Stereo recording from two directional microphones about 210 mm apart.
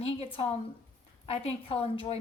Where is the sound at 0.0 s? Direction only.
30° left (ahead or behind).